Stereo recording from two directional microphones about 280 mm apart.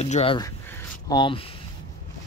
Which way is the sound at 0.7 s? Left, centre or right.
Centre.